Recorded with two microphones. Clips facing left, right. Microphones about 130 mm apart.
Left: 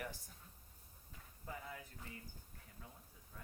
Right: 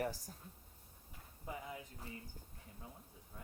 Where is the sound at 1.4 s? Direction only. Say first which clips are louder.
Right 3 dB; 20° right (ahead or behind).